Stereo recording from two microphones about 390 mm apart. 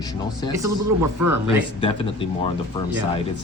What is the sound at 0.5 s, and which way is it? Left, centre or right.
Speech, centre.